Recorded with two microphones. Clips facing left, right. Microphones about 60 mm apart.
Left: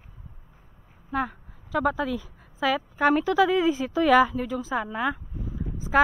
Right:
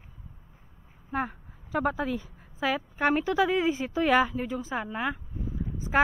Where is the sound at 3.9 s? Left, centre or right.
Left.